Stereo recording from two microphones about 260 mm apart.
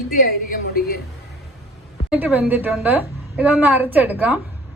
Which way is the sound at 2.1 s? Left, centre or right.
Centre.